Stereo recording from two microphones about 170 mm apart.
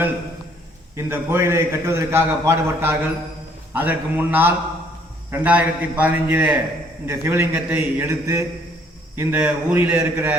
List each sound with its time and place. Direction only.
0.9 s a man's voice: 15° right (ahead or behind)